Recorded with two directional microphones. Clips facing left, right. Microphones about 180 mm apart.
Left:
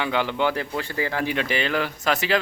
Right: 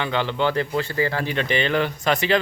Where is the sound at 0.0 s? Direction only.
10° left (ahead or behind).